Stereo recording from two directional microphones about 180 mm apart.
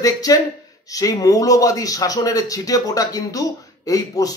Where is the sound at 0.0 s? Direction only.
20° left (ahead or behind).